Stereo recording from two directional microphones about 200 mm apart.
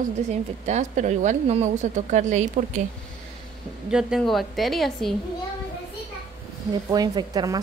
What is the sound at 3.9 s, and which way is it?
A woman's voice, centre (ahead or behind).